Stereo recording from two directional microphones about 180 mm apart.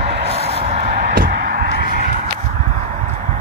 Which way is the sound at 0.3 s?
35° right (ahead or behind).